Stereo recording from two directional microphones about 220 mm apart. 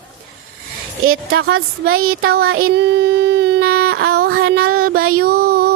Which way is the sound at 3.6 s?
75° right (ahead or behind).